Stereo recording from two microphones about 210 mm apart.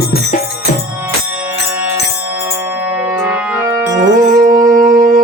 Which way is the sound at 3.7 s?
15° right (ahead or behind).